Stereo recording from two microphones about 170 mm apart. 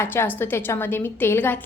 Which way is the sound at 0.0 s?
15° left (ahead or behind).